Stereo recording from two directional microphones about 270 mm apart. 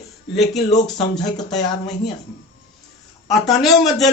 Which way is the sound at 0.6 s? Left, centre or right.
Left.